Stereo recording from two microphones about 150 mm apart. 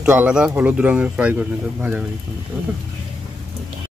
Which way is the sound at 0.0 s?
10° right (ahead or behind).